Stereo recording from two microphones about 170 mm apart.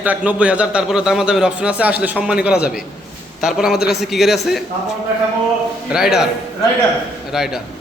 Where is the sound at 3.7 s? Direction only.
70° left (ahead or behind).